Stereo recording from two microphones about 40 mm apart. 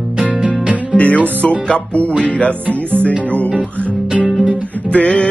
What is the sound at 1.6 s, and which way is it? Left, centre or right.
Music, left.